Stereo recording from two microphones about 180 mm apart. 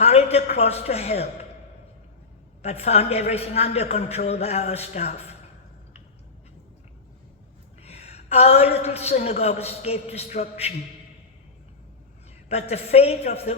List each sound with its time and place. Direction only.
0.0 s a woman's voice: 35° left (ahead or behind)
2.6 s a woman's voice: 35° left (ahead or behind)
7.8 s a woman's voice: 35° left (ahead or behind)
12.5 s a woman's voice: 35° left (ahead or behind)